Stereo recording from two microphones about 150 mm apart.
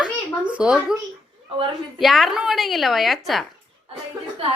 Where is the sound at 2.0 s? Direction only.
Centre (ahead or behind).